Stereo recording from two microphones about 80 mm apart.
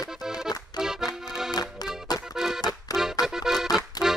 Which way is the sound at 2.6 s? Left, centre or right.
Left.